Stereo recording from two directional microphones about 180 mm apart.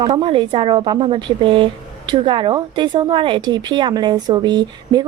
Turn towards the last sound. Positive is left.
turn(degrees=-25)  # may be behind; listen again after turning